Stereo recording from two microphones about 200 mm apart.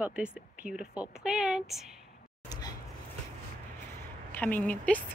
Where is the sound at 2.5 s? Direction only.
20° left (ahead or behind).